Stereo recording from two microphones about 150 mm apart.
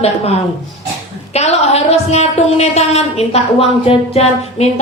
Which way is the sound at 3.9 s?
40° left (ahead or behind).